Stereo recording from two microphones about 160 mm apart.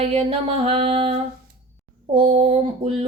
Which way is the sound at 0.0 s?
40° right (ahead or behind).